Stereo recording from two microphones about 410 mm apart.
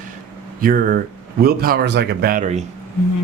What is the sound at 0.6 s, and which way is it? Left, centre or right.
Speech, right.